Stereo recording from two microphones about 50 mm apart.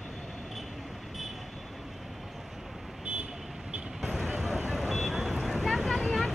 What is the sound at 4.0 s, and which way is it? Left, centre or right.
Vehicle, centre.